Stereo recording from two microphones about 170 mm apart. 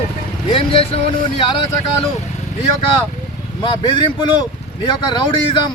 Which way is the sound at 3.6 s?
30° left (ahead or behind).